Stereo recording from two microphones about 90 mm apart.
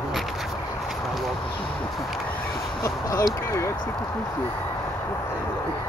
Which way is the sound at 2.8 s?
40° left (ahead or behind).